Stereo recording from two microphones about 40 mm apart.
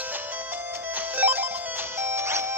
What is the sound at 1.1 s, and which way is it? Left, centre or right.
Music, right.